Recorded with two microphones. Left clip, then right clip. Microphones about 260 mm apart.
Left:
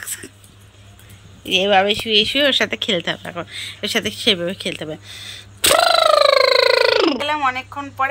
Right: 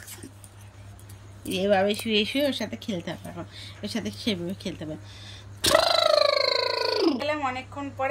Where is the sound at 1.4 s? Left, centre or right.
Centre.